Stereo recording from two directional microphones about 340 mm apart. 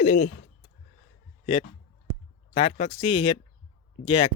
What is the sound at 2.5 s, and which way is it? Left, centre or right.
Speech, centre.